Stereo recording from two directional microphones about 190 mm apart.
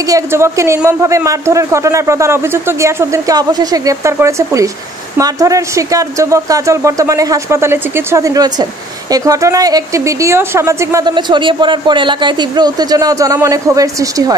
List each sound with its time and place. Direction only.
0.1 s a man's voice: 15° right (ahead or behind)